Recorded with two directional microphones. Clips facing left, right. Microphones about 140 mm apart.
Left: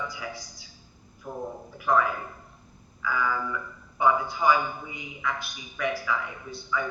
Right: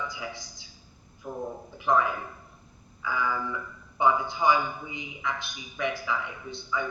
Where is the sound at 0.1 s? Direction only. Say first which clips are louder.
Left 1 dB; 25° right (ahead or behind).